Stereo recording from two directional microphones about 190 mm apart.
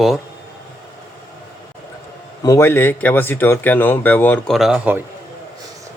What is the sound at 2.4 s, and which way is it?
Speech, 15° left (ahead or behind).